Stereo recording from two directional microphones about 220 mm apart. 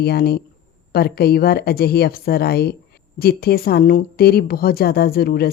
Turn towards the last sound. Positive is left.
turn(degrees=45)  # may be behind; listen again after turning